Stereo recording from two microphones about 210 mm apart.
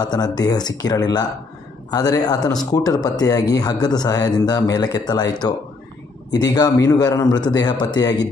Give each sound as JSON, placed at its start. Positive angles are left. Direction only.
{"t": 0.0, "sound": "a man's voice", "side_deg": 20}